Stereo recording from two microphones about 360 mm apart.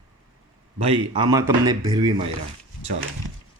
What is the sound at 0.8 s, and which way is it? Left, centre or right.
Speech, centre.